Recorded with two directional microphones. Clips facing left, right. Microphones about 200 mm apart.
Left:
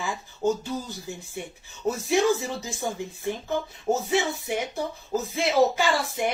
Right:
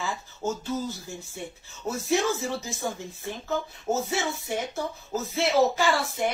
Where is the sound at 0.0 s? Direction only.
15° left (ahead or behind).